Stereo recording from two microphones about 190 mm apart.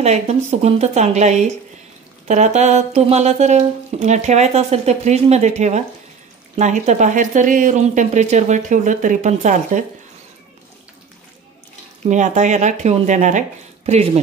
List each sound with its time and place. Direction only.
0.0 s speech: 35° right (ahead or behind)
12.0 s speech: 40° right (ahead or behind)